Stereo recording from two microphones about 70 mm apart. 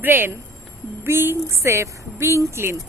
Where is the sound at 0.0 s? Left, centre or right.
Right.